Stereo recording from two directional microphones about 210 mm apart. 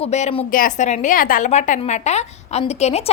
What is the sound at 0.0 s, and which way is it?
A woman's voice, 30° left (ahead or behind).